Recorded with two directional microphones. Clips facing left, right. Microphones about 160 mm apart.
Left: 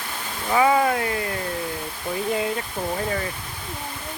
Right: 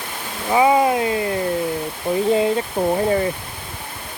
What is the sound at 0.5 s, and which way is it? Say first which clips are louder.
Speech: right 4 dB; 20° right (ahead or behind).